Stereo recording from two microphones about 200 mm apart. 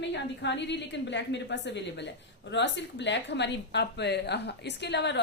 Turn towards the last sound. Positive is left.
turn(degrees=60)  # may be behind; listen again after turning